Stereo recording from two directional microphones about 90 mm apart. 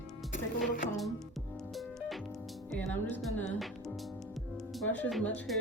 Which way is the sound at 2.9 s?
20° left (ahead or behind).